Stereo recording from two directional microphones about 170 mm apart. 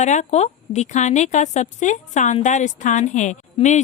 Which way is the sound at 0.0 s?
45° left (ahead or behind).